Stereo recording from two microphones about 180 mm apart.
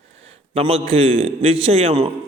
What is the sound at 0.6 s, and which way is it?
A man's voice, 30° right (ahead or behind).